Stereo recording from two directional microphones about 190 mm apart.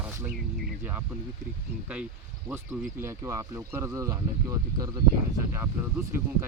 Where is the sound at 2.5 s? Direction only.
10° right (ahead or behind).